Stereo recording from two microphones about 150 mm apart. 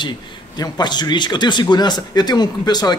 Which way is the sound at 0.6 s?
30° left (ahead or behind).